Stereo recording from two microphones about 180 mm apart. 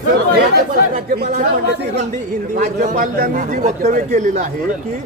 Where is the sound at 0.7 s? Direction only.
60° right (ahead or behind).